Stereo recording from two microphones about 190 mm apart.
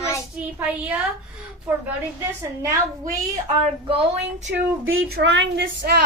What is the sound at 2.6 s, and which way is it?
Speech, 15° right (ahead or behind).